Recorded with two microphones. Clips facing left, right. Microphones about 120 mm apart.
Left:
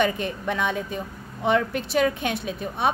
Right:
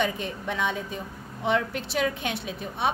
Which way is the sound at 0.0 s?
60° left (ahead or behind).